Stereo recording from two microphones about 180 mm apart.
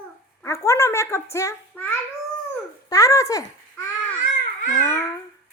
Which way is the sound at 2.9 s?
20° left (ahead or behind).